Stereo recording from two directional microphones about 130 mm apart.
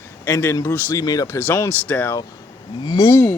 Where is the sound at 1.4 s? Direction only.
15° left (ahead or behind).